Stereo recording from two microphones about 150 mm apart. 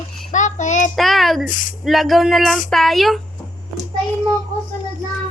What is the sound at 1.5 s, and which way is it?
Speech, 60° left (ahead or behind).